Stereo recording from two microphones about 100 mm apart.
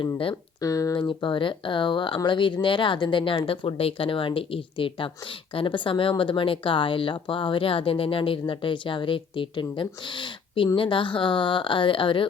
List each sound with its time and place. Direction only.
0.6 s speech: 35° left (ahead or behind)
0.9 s speech: 50° left (ahead or behind)